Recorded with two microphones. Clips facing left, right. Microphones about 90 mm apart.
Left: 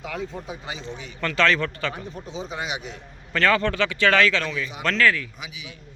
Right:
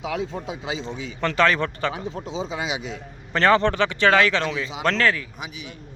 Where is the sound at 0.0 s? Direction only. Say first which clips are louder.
Right 4 dB; 90° right.